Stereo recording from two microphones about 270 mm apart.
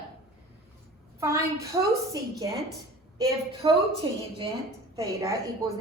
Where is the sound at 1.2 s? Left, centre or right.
Centre.